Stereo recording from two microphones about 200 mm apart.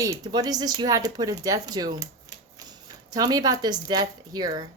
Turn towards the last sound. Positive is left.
turn(degrees=-20)  # may be behind; listen again after turning